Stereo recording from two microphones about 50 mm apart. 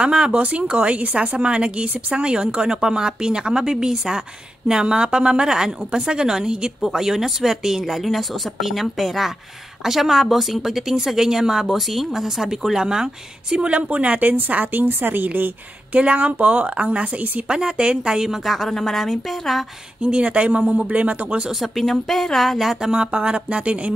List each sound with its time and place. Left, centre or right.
0.0 s a woman's voice: right
13.7 s a woman's voice: right
15.9 s a woman's voice: right; by 19.6 s centre
20.0 s a woman's voice: right
21.5 s speech: centre; by 23.9 s right